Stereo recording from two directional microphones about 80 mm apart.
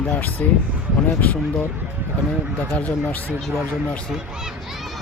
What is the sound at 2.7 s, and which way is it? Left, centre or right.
Speech, centre.